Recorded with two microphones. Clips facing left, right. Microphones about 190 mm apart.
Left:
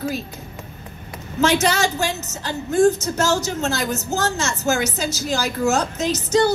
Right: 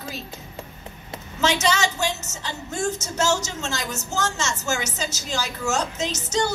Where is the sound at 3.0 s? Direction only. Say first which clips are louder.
Left 3 dB; 55° left (ahead or behind).